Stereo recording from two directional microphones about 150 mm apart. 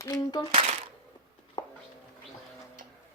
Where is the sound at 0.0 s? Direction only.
25° left (ahead or behind).